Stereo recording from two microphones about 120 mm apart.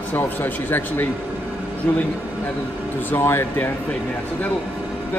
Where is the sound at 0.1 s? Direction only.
15° left (ahead or behind).